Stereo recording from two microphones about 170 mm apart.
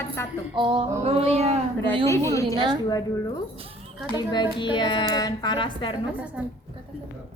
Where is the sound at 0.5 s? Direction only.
30° right (ahead or behind).